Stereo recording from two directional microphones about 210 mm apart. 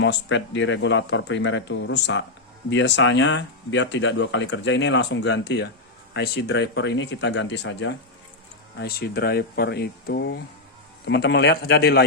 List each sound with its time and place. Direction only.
0.0 s speech: 60° left (ahead or behind)
8.8 s speech: 45° left (ahead or behind)